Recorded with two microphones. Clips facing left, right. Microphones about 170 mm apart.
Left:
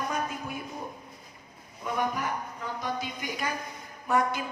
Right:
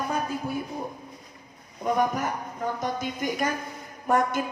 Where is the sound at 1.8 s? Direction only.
45° right (ahead or behind).